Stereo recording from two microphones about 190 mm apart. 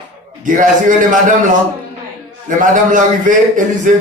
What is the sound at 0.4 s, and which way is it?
Speech, 40° right (ahead or behind).